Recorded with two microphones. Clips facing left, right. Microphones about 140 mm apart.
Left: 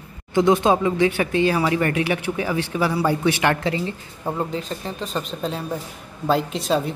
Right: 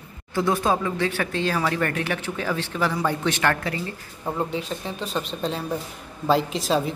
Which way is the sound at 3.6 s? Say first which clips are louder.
Left 5 dB; 25° left (ahead or behind).